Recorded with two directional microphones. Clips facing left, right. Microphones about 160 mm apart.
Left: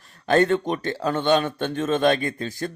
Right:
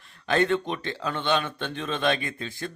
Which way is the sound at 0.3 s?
45° left (ahead or behind).